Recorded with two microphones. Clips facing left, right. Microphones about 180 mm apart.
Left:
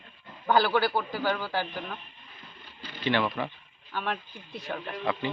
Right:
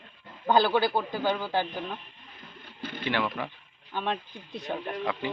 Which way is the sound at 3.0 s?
10° right (ahead or behind).